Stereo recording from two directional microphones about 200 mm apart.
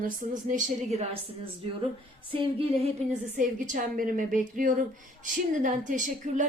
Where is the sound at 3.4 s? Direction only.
40° right (ahead or behind).